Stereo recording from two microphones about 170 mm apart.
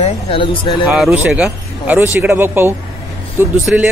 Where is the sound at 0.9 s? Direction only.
Centre (ahead or behind).